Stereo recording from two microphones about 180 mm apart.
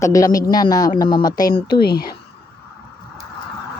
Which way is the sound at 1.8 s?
60° left (ahead or behind).